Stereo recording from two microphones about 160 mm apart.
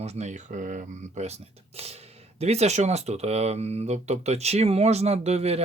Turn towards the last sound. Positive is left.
turn(degrees=-40)  # may be behind; listen again after turning